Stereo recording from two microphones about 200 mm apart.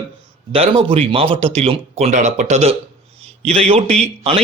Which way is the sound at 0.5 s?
30° right (ahead or behind).